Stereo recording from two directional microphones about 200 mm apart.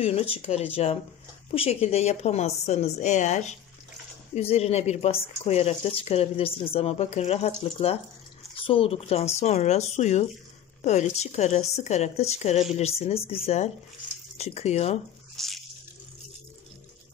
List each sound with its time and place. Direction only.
0.0 s speech: 30° left (ahead or behind)
15.3 s drip: centre (ahead or behind)